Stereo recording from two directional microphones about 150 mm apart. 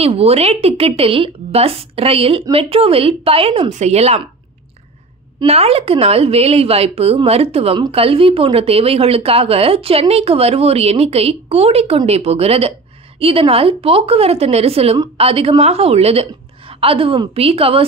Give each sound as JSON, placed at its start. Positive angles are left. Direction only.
{"t": 0.0, "sound": "speech", "side_deg": -40}
{"t": 5.4, "sound": "speech", "side_deg": -40}